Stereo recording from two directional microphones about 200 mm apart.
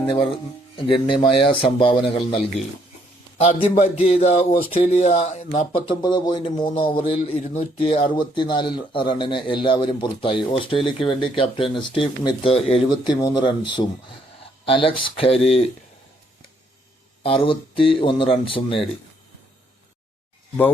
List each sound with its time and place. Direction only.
0.1 s speech: 25° left (ahead or behind)
14.6 s speech: 25° left (ahead or behind)
17.2 s speech: 25° left (ahead or behind)